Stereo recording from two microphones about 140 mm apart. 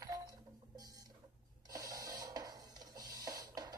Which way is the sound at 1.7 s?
25° right (ahead or behind).